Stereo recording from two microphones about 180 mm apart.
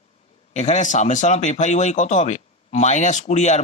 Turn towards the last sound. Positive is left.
turn(degrees=40)  # may be behind; listen again after turning